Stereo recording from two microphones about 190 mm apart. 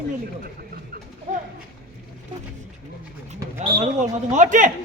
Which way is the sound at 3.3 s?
25° right (ahead or behind).